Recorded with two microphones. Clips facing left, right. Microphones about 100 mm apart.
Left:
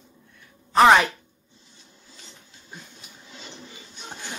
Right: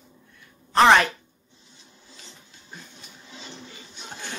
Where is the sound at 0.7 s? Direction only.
5° left (ahead or behind).